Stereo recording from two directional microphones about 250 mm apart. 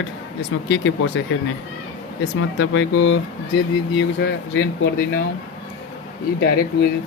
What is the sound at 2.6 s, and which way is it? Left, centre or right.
Speech, left.